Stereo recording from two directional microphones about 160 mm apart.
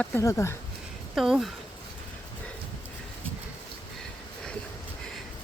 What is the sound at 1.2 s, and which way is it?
Speech, centre (ahead or behind).